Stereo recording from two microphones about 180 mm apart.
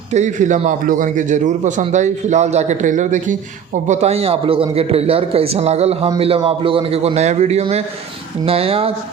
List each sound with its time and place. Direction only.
0.1 s a man's voice: 40° right (ahead or behind)